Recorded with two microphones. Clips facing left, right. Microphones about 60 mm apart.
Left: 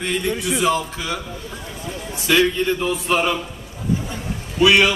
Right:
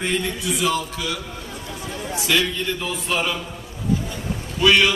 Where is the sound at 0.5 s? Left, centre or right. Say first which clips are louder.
Left 2 dB; left.